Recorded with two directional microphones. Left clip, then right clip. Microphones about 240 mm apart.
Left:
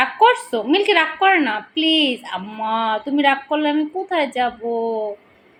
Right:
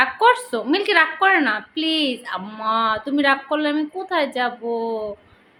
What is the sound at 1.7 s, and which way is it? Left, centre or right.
Speech, right.